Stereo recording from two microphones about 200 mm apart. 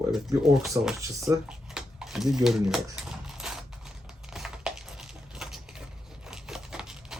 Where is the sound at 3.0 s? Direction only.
Centre (ahead or behind).